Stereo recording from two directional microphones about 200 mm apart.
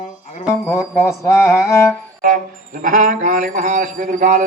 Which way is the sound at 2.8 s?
40° right (ahead or behind).